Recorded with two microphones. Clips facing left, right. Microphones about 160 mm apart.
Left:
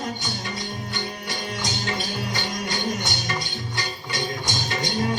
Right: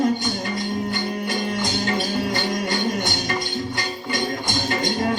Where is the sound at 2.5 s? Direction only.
50° right (ahead or behind).